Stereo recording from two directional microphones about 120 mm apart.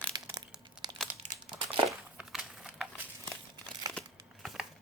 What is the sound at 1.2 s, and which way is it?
Crumpling, 90° right.